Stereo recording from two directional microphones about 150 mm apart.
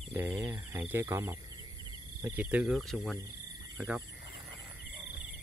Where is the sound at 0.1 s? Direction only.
15° right (ahead or behind).